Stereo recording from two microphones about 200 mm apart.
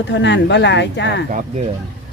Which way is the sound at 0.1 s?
60° left (ahead or behind).